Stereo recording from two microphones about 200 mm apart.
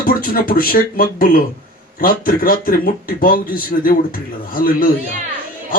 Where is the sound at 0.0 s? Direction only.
45° left (ahead or behind).